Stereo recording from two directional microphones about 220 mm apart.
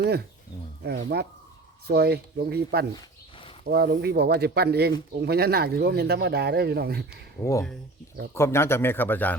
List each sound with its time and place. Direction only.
0.0 s speech: 45° right (ahead or behind)
7.4 s a man's voice: 15° left (ahead or behind)